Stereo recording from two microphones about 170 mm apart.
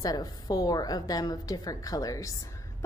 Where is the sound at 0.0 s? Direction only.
25° left (ahead or behind).